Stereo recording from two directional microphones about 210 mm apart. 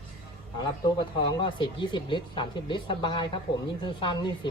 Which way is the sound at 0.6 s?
20° left (ahead or behind).